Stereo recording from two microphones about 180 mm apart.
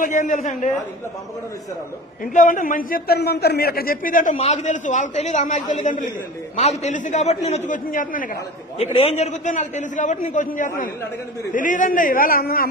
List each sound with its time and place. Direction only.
0.0 s a man's voice: 45° left (ahead or behind)
2.3 s a man's voice: 45° left (ahead or behind)
8.7 s a man's voice: 35° left (ahead or behind); by 12.6 s 55° left (ahead or behind)